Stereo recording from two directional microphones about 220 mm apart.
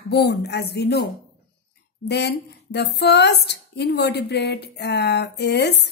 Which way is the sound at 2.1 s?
50° left (ahead or behind).